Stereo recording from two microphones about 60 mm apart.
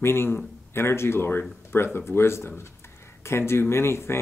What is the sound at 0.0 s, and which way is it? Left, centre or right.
Speech, left.